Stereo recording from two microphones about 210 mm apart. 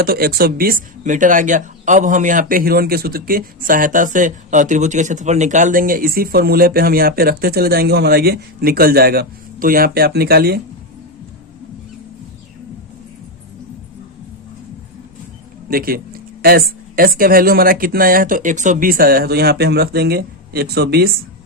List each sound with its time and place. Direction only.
0.0 s speech: 45° right (ahead or behind)
15.7 s speech: 45° right (ahead or behind)